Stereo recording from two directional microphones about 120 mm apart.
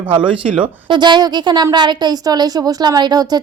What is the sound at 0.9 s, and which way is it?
A woman's voice, 40° right (ahead or behind).